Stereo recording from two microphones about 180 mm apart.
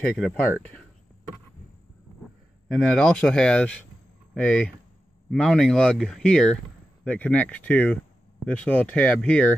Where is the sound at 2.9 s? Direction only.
5° left (ahead or behind).